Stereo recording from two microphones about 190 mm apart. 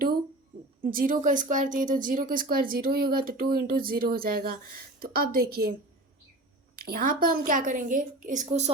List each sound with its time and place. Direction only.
0.8 s speech: 50° right (ahead or behind)
6.8 s speech: 50° right (ahead or behind)